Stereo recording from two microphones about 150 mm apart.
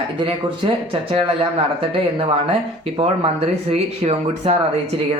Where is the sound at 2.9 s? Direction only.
40° right (ahead or behind).